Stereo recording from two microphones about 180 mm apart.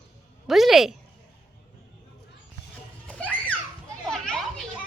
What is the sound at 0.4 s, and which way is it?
Speech, centre (ahead or behind).